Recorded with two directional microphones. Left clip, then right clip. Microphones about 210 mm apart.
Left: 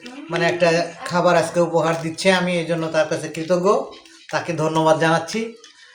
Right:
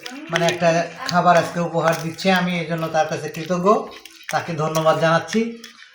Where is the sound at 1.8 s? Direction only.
30° left (ahead or behind).